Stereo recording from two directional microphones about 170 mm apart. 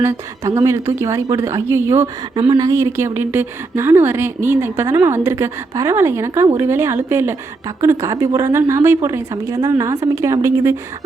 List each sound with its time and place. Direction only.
0.0 s a woman's voice: 15° right (ahead or behind)